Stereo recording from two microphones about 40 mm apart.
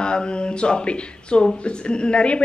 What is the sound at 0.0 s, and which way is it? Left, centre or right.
Speech, left.